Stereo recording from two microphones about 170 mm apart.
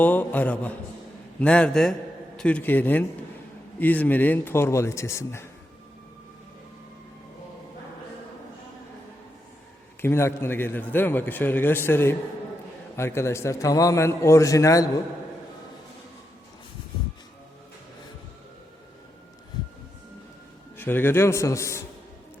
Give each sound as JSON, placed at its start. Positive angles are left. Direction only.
{"t": 0.0, "sound": "a man's voice", "side_deg": 10}
{"t": 10.0, "sound": "a man's voice", "side_deg": 15}
{"t": 20.7, "sound": "a man's voice", "side_deg": 10}